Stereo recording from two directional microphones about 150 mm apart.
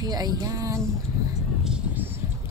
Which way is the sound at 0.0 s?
25° right (ahead or behind).